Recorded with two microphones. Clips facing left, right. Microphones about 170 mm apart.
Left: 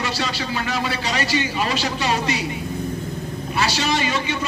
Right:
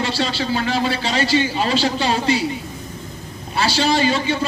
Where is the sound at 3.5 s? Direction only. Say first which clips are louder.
Right 4 dB; 30° right (ahead or behind).